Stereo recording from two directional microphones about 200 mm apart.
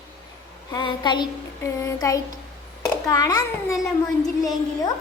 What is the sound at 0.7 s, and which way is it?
A child's voice, 20° left (ahead or behind).